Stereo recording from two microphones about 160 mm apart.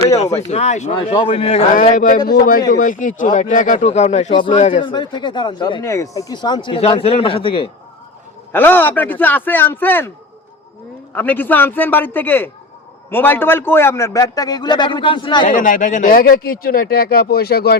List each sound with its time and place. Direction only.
0.5 s speech: 45° left (ahead or behind)
0.9 s speech: 30° left (ahead or behind)
1.7 s a man's voice: 55° left (ahead or behind)
4.4 s speech: 30° left (ahead or behind)
8.5 s a man's voice: 15° left (ahead or behind)
11.1 s a man's voice: 10° left (ahead or behind); by 15.4 s 30° left (ahead or behind)
15.4 s speech: 55° left (ahead or behind); by 17.7 s 80° left